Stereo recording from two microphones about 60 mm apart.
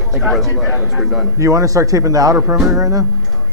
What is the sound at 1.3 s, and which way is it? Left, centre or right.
A man's voice, right.